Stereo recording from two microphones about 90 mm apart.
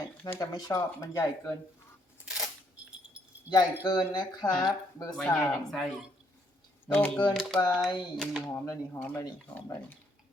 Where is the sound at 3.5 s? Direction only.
50° left (ahead or behind).